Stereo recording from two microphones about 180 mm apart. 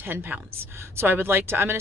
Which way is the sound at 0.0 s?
10° right (ahead or behind).